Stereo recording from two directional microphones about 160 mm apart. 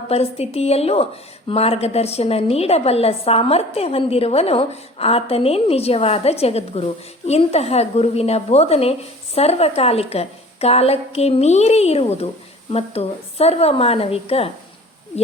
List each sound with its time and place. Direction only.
0.1 s a woman's voice: 40° left (ahead or behind)